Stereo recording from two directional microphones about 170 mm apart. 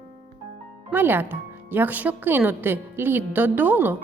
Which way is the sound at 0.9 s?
10° right (ahead or behind).